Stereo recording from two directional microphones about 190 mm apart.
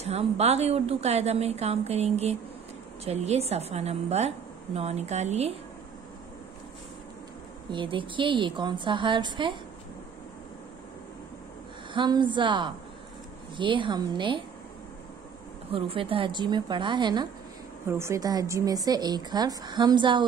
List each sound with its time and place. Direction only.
0.0 s a woman's voice: 35° right (ahead or behind)
7.7 s a woman's voice: 25° right (ahead or behind)
11.9 s a woman's voice: 25° right (ahead or behind)
15.7 s a woman's voice: 30° right (ahead or behind)